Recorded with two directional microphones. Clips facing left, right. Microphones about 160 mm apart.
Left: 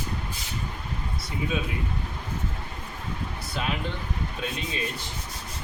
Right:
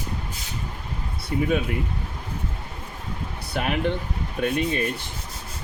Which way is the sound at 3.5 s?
60° right (ahead or behind).